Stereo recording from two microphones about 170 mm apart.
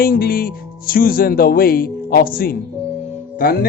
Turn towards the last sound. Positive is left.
turn(degrees=60)  # may be behind; listen again after turning